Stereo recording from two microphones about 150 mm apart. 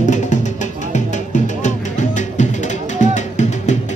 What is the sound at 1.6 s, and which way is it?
Music, 55° left (ahead or behind).